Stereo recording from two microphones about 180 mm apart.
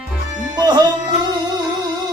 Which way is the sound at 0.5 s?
25° right (ahead or behind).